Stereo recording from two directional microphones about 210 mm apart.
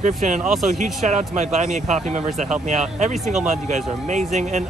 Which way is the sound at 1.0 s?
35° right (ahead or behind).